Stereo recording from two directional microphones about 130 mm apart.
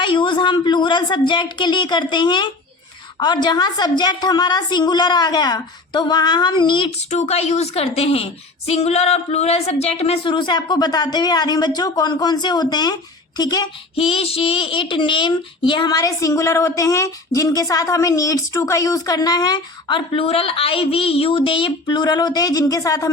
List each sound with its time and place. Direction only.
0.0 s a woman's voice: 40° left (ahead or behind)
7.1 s a woman's voice: 55° left (ahead or behind); by 13.7 s 30° left (ahead or behind)
13.9 s a child's voice: 45° left (ahead or behind)
20.1 s a woman's voice: 45° left (ahead or behind); by 23.0 s 25° left (ahead or behind)